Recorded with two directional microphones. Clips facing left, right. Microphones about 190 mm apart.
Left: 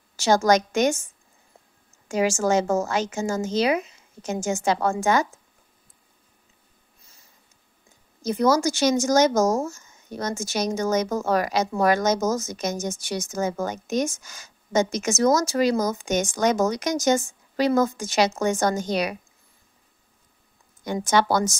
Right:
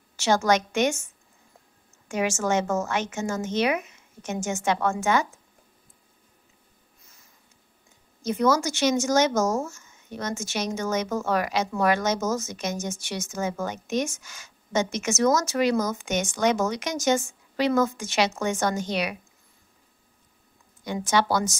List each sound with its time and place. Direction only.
0.1 s speech: 40° left (ahead or behind)
2.0 s speech: 30° left (ahead or behind)
8.2 s speech: 40° left (ahead or behind)
20.8 s a woman's voice: 45° left (ahead or behind)